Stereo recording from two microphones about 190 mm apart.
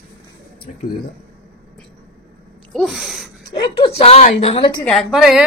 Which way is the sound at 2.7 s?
Centre (ahead or behind).